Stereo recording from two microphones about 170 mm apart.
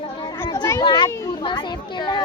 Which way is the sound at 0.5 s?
20° left (ahead or behind).